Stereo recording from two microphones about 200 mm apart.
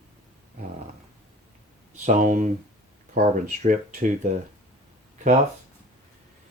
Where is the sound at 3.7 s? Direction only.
40° right (ahead or behind).